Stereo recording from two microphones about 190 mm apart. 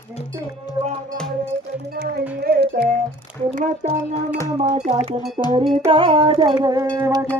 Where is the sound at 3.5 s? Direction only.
45° right (ahead or behind).